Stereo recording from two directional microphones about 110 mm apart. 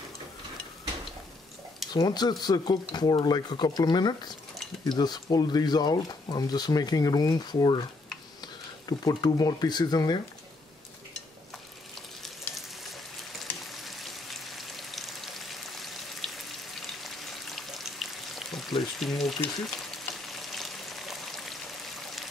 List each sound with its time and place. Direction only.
1.9 s speech: 40° left (ahead or behind)
12.2 s a sound: centre (ahead or behind)
13.7 s raindrop: centre (ahead or behind)
17.0 s frying: centre (ahead or behind)